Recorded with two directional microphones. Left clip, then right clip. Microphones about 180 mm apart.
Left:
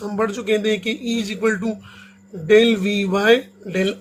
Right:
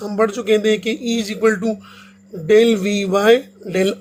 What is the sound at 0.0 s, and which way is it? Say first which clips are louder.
Speech: right 4 dB; 30° right (ahead or behind).